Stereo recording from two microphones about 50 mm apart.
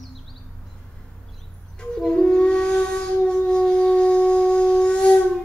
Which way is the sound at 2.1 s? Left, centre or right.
Centre.